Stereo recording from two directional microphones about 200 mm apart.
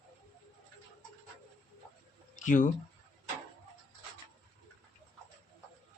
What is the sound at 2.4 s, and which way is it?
Speech, 40° left (ahead or behind).